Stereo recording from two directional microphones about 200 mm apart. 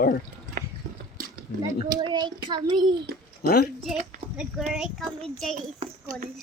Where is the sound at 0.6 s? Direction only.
45° right (ahead or behind).